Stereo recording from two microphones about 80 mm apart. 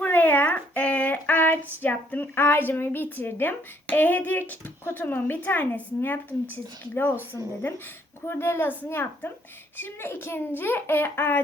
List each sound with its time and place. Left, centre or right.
0.0 s child singing: left
3.8 s a child's voice: left
8.2 s a child's voice: left